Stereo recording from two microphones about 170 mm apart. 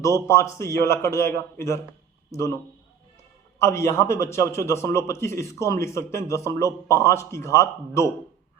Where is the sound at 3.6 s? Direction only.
15° left (ahead or behind).